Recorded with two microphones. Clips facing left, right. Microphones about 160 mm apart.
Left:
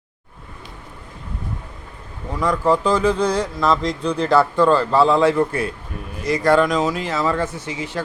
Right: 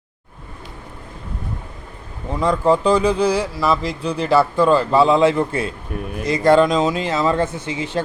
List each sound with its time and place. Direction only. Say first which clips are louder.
2.3 s speech: right 2 dB; 25° right (ahead or behind)